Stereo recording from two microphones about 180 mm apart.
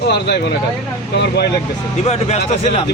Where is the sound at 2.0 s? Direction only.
35° left (ahead or behind).